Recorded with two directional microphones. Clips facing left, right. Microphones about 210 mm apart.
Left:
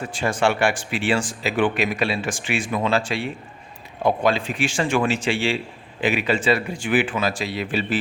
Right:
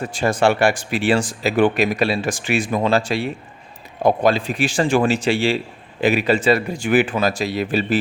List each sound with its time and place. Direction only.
0.1 s speech: 40° right (ahead or behind)